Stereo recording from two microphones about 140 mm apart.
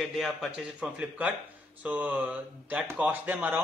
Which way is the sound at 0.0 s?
Centre (ahead or behind).